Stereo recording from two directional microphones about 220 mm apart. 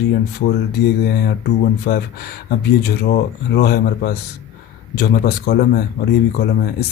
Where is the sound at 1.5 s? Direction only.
45° left (ahead or behind).